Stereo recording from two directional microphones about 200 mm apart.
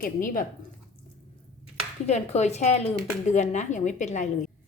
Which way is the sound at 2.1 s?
35° left (ahead or behind).